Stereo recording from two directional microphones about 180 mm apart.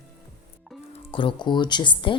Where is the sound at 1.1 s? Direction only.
30° left (ahead or behind).